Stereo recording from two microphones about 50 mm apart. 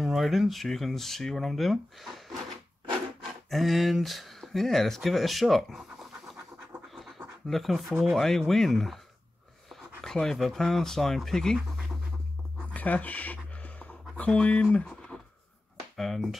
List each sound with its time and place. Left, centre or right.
0.0 s speech: centre
3.4 s speech: centre
6.9 s scratch: centre
7.4 s speech: centre
12.5 s a sound: left
15.1 s writing: centre
16.0 s speech: centre